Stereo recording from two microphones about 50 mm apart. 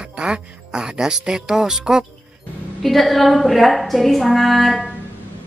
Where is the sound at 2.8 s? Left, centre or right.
Centre.